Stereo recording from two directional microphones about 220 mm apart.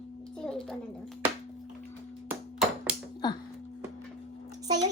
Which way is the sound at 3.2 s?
20° left (ahead or behind).